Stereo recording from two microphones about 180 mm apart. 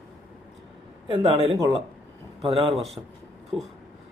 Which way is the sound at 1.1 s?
30° right (ahead or behind).